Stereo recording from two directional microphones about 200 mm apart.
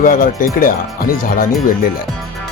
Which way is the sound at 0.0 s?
40° left (ahead or behind).